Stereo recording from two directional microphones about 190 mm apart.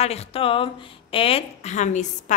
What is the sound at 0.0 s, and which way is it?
A woman's voice, 35° left (ahead or behind).